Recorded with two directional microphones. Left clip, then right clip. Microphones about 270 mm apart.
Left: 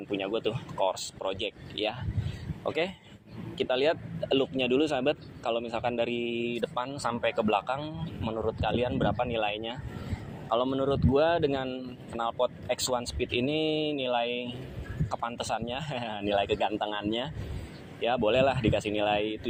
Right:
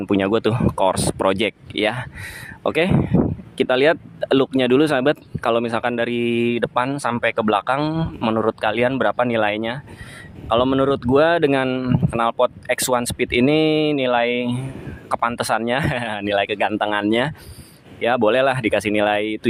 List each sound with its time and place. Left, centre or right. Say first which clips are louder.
0.0 s speech: right 12 dB; right
6.1 s speech: right 11 dB; right
6.6 s speech: right 11 dB; right
13.7 s speech: right 11 dB; right
13.9 s speech: right 11 dB; right